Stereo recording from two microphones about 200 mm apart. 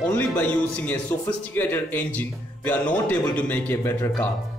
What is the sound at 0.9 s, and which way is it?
Speech, 10° left (ahead or behind).